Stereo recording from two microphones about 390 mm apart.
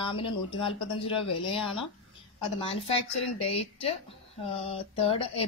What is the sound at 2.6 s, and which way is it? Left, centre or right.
A woman's voice, centre.